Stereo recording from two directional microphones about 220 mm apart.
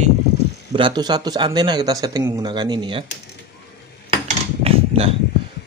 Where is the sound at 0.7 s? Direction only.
20° right (ahead or behind).